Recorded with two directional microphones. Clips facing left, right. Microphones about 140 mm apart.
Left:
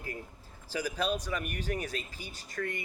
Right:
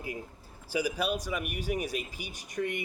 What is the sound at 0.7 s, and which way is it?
A man's voice, 10° right (ahead or behind).